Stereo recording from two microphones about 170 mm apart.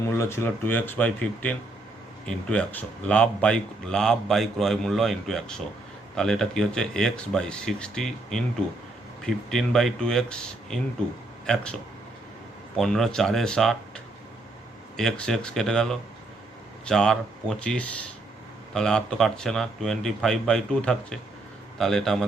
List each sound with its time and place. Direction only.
0.1 s speech: 15° left (ahead or behind)